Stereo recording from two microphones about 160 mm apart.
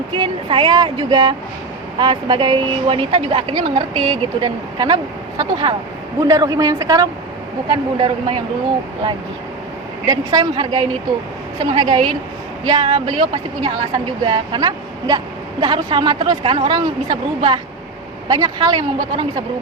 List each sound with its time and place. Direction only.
0.2 s a woman's voice: 35° right (ahead or behind)
7.7 s speech: 35° right (ahead or behind)
10.1 s a woman's voice: 25° right (ahead or behind)